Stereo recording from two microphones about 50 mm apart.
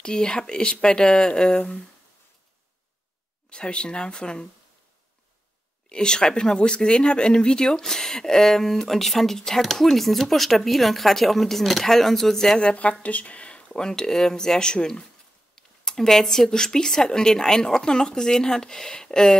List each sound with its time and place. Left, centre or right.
0.0 s speech: centre
3.4 s speech: centre
5.9 s speech: centre
12.5 s a woman's voice: left
13.7 s speech: centre